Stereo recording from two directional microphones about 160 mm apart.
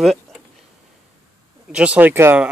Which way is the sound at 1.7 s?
10° right (ahead or behind).